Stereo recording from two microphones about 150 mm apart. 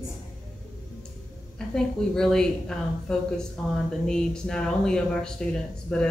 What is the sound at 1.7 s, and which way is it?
Speech, 5° left (ahead or behind).